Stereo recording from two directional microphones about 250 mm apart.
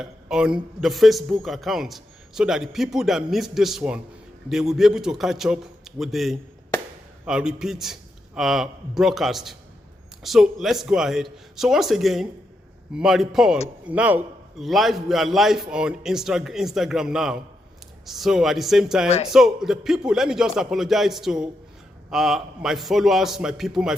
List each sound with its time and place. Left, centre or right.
0.0 s a man's voice: centre
19.0 s speech: left
19.3 s a man's voice: centre